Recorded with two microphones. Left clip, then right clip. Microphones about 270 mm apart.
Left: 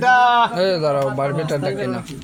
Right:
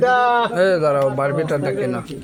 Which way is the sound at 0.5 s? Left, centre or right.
Centre.